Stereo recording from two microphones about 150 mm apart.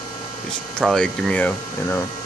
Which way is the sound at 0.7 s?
5° left (ahead or behind).